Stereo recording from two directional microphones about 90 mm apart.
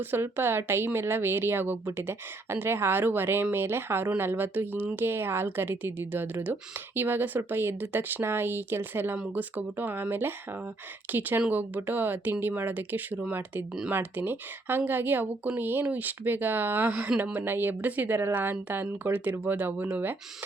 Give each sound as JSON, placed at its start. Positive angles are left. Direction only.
{"t": 0.0, "sound": "a woman's voice", "side_deg": -25}